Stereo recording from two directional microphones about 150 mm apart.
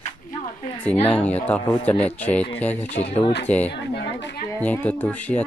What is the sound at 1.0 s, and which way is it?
Speech, 10° left (ahead or behind).